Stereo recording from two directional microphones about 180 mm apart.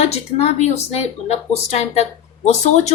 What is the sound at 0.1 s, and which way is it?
Speech, 35° left (ahead or behind).